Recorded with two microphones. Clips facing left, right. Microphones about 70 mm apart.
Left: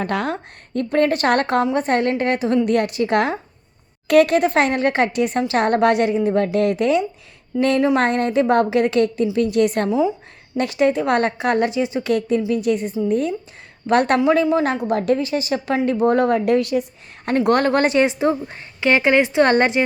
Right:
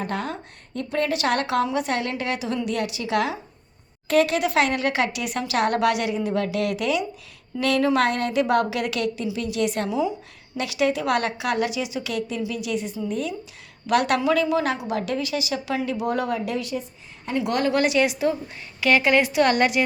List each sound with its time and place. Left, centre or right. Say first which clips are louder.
0.0 s a woman's voice: left 6 dB; left
14.2 s a woman's voice: left 5 dB; left